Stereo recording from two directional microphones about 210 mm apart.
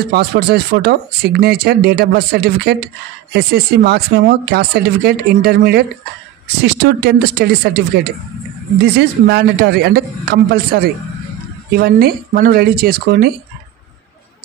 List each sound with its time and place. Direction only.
0.1 s speech: 50° right (ahead or behind)